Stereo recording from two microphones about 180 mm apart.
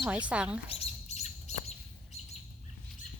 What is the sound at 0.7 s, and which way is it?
Bird, 35° left (ahead or behind).